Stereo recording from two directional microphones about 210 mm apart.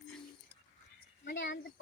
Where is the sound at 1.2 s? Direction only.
55° left (ahead or behind).